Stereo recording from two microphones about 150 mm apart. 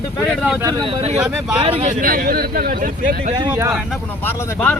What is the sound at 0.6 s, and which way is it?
Speech, 30° right (ahead or behind).